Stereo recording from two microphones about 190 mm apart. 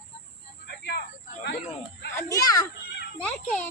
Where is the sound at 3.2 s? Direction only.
5° left (ahead or behind).